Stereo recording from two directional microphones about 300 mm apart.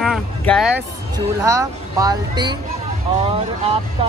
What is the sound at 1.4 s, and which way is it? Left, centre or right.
Speech, centre.